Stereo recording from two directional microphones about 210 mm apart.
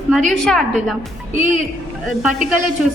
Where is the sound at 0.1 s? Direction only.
Centre (ahead or behind).